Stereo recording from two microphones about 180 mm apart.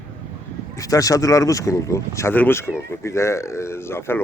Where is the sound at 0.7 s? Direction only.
20° left (ahead or behind).